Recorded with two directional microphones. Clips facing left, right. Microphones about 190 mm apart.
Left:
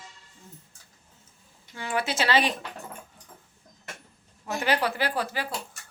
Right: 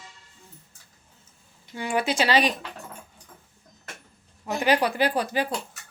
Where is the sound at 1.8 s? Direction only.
15° right (ahead or behind).